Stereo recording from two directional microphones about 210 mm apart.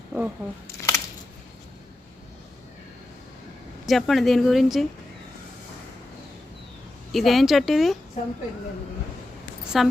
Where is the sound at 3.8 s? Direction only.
Centre (ahead or behind).